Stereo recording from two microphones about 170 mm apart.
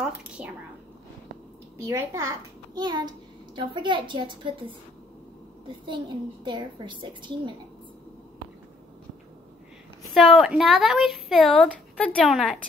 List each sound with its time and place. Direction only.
0.0 s a woman's voice: 5° right (ahead or behind)
1.9 s a woman's voice: 15° right (ahead or behind)
6.4 s a woman's voice: 30° right (ahead or behind)
10.1 s speech: centre (ahead or behind)